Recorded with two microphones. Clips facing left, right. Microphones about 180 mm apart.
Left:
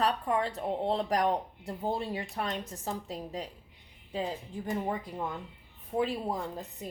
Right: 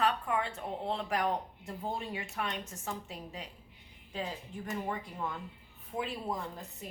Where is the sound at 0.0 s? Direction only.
35° left (ahead or behind).